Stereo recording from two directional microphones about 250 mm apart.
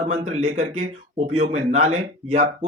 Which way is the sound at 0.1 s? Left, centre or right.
Right.